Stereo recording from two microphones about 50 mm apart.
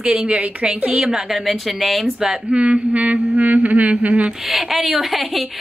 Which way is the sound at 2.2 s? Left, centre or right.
Centre.